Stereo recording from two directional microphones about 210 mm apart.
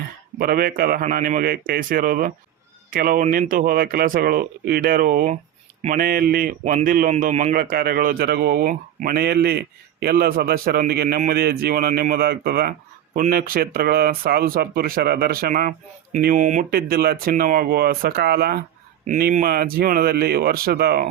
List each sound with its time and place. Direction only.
0.3 s a man's voice: 45° right (ahead or behind)
19.0 s a man's voice: 35° right (ahead or behind)